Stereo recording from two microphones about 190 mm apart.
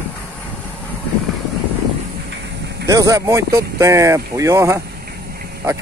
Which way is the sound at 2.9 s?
15° right (ahead or behind).